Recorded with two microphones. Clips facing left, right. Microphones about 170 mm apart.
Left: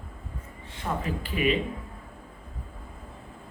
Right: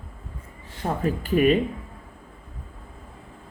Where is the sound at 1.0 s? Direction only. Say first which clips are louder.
Right 8 dB; 45° right (ahead or behind).